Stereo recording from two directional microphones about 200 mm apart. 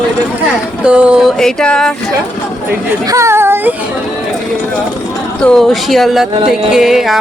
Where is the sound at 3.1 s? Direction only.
15° right (ahead or behind).